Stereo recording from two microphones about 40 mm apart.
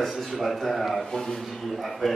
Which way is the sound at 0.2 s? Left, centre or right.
Centre.